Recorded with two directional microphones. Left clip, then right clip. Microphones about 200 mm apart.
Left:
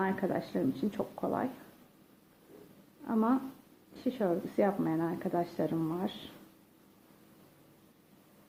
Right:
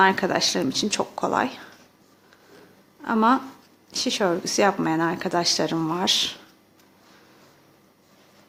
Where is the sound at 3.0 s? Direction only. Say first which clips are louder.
Right 12 dB; 30° right (ahead or behind).